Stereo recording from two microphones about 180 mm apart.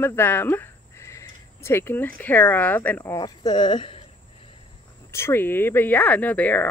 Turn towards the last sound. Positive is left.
turn(degrees=10)  # may be behind; listen again after turning